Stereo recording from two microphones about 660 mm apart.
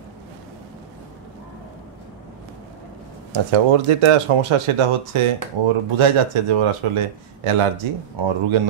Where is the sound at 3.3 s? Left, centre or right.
Right.